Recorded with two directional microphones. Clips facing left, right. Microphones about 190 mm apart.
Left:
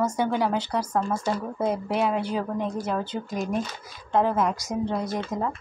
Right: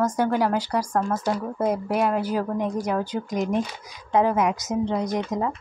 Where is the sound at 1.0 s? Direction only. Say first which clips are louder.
Right 2 dB; 5° left (ahead or behind).